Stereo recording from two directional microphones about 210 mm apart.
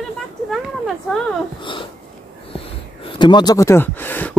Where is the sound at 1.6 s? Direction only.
25° left (ahead or behind).